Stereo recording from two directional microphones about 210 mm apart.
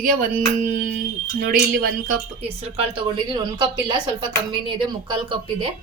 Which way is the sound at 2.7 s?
25° right (ahead or behind).